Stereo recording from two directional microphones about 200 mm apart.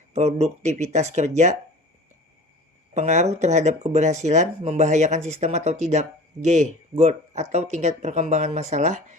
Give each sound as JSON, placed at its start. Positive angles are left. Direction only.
{"t": 0.1, "sound": "speech", "side_deg": -30}
{"t": 2.9, "sound": "speech", "side_deg": -35}